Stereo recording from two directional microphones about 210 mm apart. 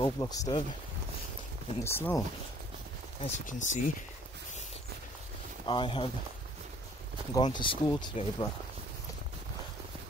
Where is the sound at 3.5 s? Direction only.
35° left (ahead or behind).